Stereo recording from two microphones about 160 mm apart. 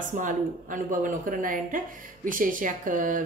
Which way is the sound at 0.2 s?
55° right (ahead or behind).